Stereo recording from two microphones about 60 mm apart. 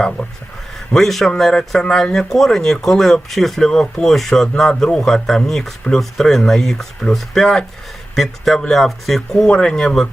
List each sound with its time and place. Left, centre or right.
0.2 s speech: left
0.9 s speech: centre